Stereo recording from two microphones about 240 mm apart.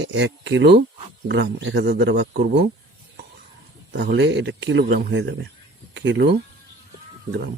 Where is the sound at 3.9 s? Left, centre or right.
Right.